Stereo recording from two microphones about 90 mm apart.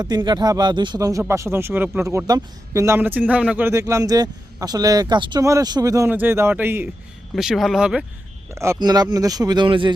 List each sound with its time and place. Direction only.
0.0 s speech: 55° right (ahead or behind)
0.9 s a man's voice: 40° right (ahead or behind)
2.0 s a man's voice: 40° right (ahead or behind)
3.0 s speech: 20° right (ahead or behind)
3.7 s speech: 35° right (ahead or behind); by 5.4 s 55° right (ahead or behind)
5.4 s a man's voice: 35° right (ahead or behind)
6.1 s speech: 20° right (ahead or behind)
7.3 s speech: 5° right (ahead or behind)
8.4 s a man's voice: 35° right (ahead or behind)
8.8 s speech: 50° right (ahead or behind)
9.6 s speech: 70° right (ahead or behind)